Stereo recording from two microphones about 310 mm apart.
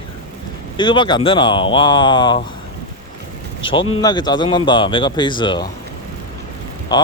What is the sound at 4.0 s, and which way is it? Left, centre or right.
Speech, centre.